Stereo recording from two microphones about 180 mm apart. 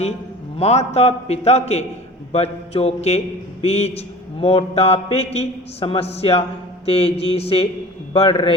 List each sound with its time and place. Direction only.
0.6 s a man's voice: 35° left (ahead or behind)